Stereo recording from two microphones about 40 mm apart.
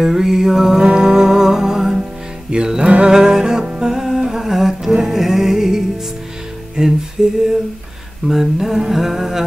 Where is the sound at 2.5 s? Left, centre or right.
Right.